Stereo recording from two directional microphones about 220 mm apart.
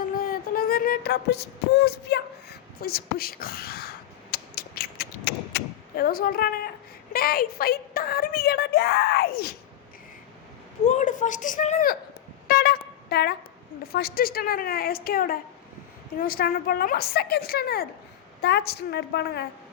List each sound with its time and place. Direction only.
0.2 s beatboxing: 40° left (ahead or behind)
7.1 s a woman's voice: 40° left (ahead or behind)
10.8 s speech: 35° left (ahead or behind)
12.5 s a sound: 45° left (ahead or behind)
13.8 s a woman's voice: 45° left (ahead or behind)